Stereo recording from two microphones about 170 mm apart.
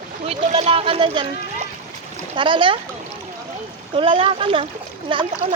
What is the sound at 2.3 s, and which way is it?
Speech, 30° right (ahead or behind).